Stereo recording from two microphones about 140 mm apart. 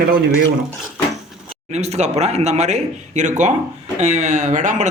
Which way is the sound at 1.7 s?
50° right (ahead or behind).